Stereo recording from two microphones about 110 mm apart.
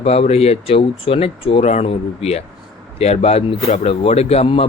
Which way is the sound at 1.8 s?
60° left (ahead or behind).